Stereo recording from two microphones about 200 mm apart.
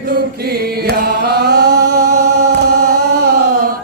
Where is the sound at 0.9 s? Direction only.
50° right (ahead or behind).